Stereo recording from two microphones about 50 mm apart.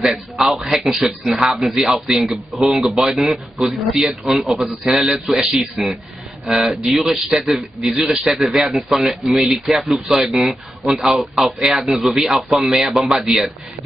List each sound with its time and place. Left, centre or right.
0.0 s a man's voice: centre